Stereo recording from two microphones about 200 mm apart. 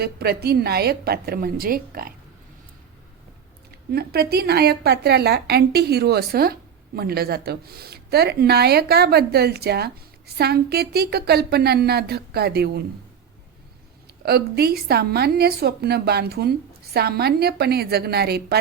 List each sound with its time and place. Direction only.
0.0 s a woman's voice: 50° right (ahead or behind)
3.9 s a woman's voice: 50° right (ahead or behind)
14.3 s a woman's voice: 50° right (ahead or behind)